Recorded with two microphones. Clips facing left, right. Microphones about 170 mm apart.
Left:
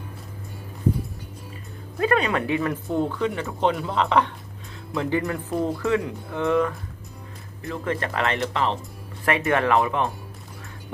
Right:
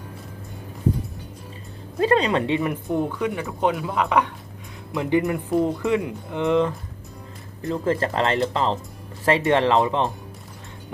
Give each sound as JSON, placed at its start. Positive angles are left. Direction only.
{"t": 2.0, "sound": "speech", "side_deg": -30}